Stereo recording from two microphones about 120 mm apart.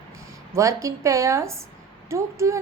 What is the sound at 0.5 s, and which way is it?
Speech, 25° right (ahead or behind).